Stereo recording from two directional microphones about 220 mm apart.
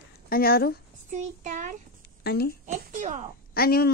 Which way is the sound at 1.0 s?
35° right (ahead or behind).